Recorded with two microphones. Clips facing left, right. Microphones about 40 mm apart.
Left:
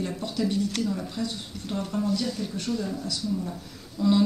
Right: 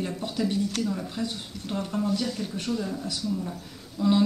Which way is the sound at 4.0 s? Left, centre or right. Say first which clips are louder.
Left 1 dB; centre.